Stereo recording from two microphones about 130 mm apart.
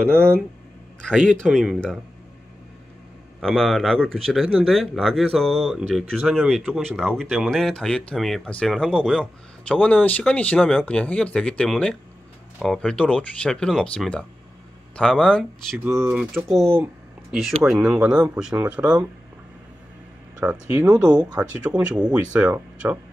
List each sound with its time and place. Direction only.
1.3 s speech: centre (ahead or behind)
3.3 s speech: 5° left (ahead or behind)
15.8 s speech: 20° right (ahead or behind)
16.1 s speech: 5° right (ahead or behind)
16.7 s a sound: 15° right (ahead or behind)
17.4 s speech: 5° right (ahead or behind)
20.7 s speech: 5° right (ahead or behind)